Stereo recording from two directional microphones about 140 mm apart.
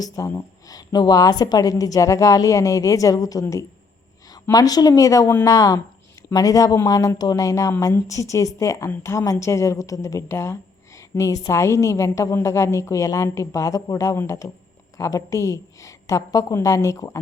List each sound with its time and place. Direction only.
0.0 s a woman's voice: 20° left (ahead or behind)